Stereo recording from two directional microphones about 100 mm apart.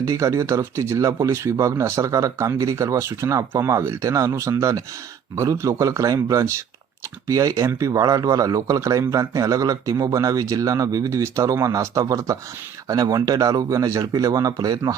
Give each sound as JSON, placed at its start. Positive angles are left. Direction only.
{"t": 0.0, "sound": "speech", "side_deg": -30}